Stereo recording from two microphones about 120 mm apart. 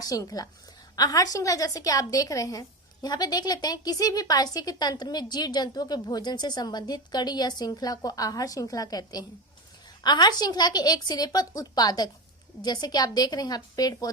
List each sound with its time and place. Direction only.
0.0 s a woman's voice: 30° left (ahead or behind)